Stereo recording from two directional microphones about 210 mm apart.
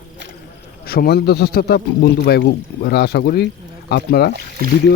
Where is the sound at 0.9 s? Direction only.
50° left (ahead or behind).